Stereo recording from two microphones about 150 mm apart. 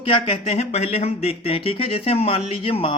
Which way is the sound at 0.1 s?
40° left (ahead or behind).